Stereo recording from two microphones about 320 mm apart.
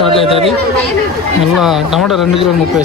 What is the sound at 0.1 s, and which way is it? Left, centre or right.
Speech, centre.